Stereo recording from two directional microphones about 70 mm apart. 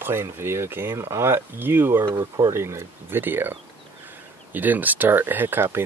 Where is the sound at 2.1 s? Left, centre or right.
Right.